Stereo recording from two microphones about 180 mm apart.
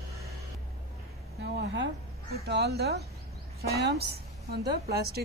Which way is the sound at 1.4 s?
80° right.